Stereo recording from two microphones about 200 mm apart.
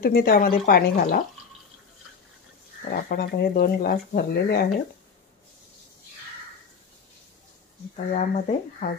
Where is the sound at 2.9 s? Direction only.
45° left (ahead or behind).